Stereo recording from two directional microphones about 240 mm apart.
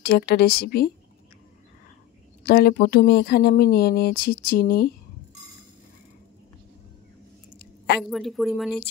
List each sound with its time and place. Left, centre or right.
0.0 s speech: left
2.4 s speech: left
7.5 s a sound: left
8.0 s speech: centre